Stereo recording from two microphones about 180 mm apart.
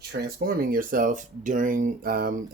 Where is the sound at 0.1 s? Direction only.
60° right (ahead or behind).